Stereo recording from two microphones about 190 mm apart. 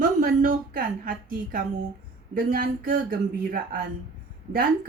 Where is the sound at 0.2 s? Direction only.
50° right (ahead or behind).